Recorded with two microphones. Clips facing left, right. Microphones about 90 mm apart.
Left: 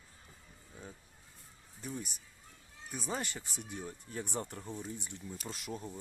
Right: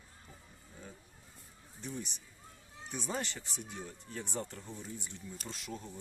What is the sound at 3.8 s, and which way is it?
Speech, 20° left (ahead or behind).